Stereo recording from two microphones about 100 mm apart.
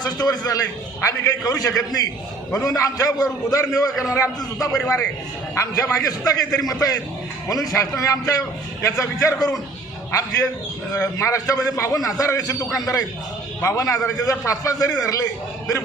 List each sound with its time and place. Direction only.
0.0 s a man's voice: 40° left (ahead or behind)